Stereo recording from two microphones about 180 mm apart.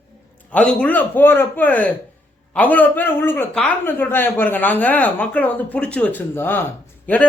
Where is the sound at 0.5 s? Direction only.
5° left (ahead or behind).